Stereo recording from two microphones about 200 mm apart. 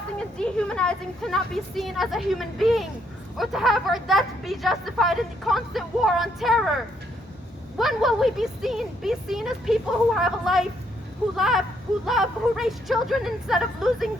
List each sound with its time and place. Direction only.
0.3 s speech: 5° left (ahead or behind)
7.8 s speech: centre (ahead or behind)